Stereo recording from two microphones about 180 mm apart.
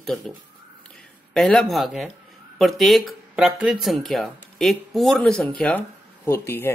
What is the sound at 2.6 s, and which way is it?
Speech, centre (ahead or behind).